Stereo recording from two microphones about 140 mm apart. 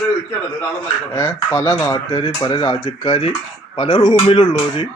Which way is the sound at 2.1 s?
35° left (ahead or behind).